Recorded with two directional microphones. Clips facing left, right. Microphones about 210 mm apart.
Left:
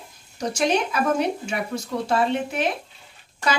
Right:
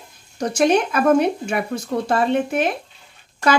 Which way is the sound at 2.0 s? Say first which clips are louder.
Right 3 dB; 50° right (ahead or behind).